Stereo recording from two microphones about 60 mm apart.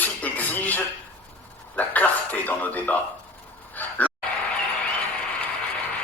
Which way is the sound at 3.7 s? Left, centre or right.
Left.